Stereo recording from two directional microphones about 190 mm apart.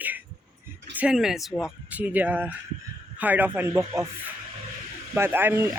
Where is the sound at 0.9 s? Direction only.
5° right (ahead or behind).